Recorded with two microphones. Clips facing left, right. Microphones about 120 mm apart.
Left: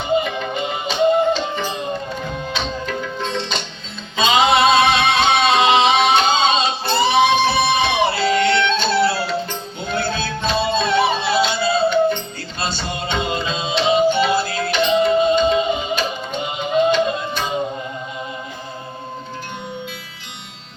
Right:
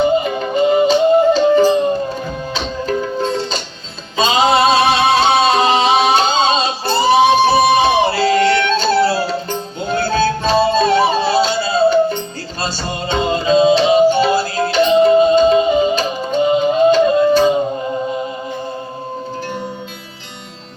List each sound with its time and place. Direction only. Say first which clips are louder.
0.3 s music: right 9 dB; 40° right (ahead or behind)
4.2 s singing: right 2 dB; 40° right (ahead or behind)
12.5 s music: right 2 dB; 40° right (ahead or behind)